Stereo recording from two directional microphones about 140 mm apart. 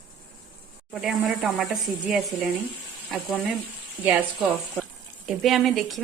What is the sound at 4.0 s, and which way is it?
Speech, 10° right (ahead or behind).